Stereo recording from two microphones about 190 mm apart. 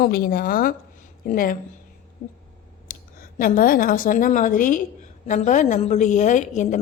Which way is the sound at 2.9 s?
50° left (ahead or behind).